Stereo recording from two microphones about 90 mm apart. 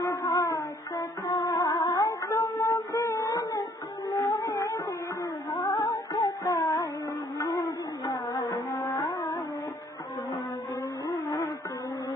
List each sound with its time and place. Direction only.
0.0 s music: 40° left (ahead or behind)
7.4 s a sound: 45° left (ahead or behind)
8.1 s music: 40° left (ahead or behind)
11.1 s music: 40° left (ahead or behind)